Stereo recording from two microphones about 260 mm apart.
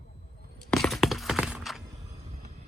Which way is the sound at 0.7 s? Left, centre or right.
Centre.